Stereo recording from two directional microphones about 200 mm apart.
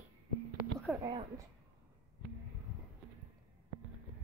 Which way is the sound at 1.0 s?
25° right (ahead or behind).